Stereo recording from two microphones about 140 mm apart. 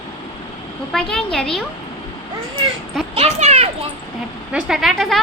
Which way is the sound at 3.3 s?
50° right (ahead or behind).